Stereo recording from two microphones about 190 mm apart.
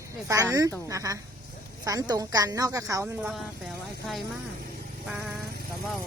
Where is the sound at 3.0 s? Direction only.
5° right (ahead or behind).